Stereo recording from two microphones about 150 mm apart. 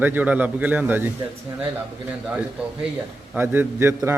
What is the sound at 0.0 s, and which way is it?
A man's voice, 10° right (ahead or behind).